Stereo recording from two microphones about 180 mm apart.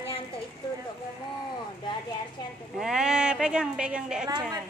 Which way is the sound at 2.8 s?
5° right (ahead or behind).